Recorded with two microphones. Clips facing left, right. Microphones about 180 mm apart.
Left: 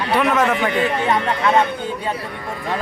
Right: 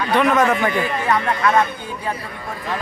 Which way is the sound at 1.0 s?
25° left (ahead or behind).